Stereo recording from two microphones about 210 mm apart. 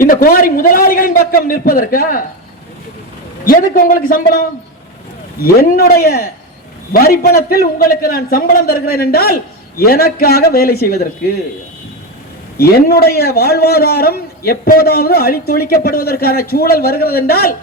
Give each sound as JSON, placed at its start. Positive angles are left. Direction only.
{"t": 0.0, "sound": "a man's voice", "side_deg": 40}
{"t": 3.4, "sound": "a man's voice", "side_deg": 45}
{"t": 12.5, "sound": "a man's voice", "side_deg": 50}